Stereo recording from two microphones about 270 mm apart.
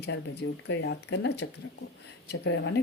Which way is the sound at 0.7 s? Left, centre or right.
Left.